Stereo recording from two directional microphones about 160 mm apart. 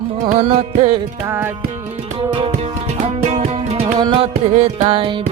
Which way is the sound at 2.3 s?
35° right (ahead or behind).